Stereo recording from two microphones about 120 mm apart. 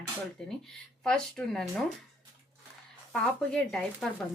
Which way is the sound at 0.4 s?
5° left (ahead or behind).